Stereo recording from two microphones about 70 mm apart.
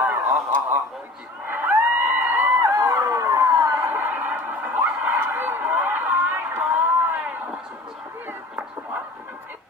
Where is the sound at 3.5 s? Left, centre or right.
Right.